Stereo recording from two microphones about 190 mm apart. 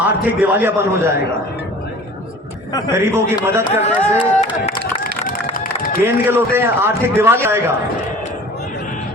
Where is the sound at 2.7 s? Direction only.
20° left (ahead or behind).